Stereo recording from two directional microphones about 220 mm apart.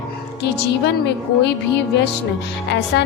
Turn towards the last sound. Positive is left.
turn(degrees=50)  # may be behind; listen again after turning